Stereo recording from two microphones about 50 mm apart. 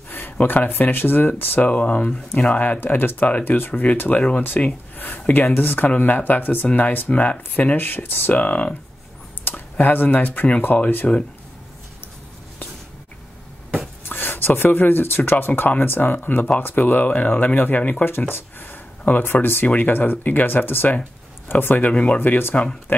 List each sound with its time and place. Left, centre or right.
0.1 s speech: left
1.7 s speech: left
2.8 s speech: left
7.7 s speech: left
8.3 s speech: left
9.4 s speech: left
14.0 s speech: left
18.3 s speech: left